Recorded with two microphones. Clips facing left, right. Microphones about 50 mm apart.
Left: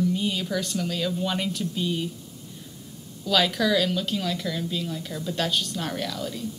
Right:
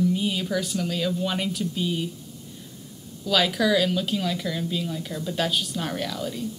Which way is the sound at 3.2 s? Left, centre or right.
Centre.